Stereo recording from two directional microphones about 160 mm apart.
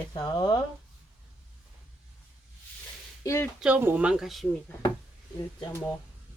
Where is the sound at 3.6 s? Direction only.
10° right (ahead or behind).